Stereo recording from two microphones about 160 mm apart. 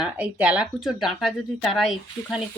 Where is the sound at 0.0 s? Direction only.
10° right (ahead or behind).